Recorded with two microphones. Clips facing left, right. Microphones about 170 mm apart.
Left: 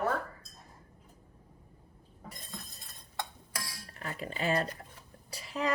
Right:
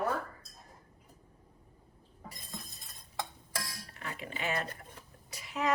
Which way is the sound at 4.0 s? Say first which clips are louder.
Left 3 dB; 40° left (ahead or behind).